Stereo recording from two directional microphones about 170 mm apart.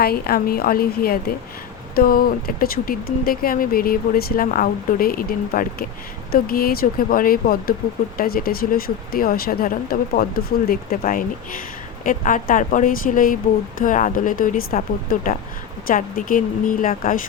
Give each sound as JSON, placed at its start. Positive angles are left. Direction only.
{"t": 0.0, "sound": "a woman's voice", "side_deg": 65}